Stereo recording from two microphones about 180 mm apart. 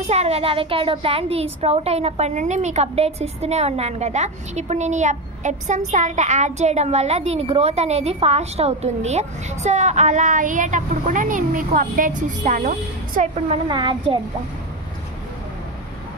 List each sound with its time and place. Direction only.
0.1 s a child's voice: 35° right (ahead or behind)
13.5 s a woman's voice: 25° right (ahead or behind)